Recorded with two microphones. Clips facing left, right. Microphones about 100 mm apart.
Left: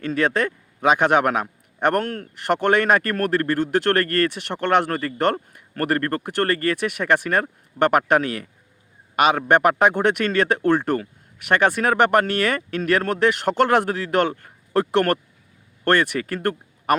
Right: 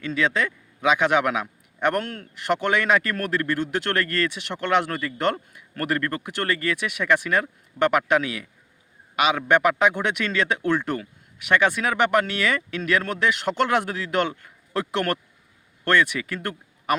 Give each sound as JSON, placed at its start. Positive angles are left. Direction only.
{"t": 0.0, "sound": "a man's voice", "side_deg": 45}